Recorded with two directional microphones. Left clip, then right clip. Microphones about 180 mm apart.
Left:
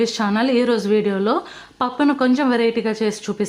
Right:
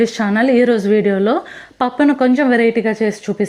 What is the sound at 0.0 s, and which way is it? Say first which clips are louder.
A woman's voice: right 4 dB; 20° right (ahead or behind).